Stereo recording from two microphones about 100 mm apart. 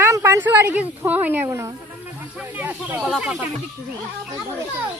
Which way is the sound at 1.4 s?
30° right (ahead or behind).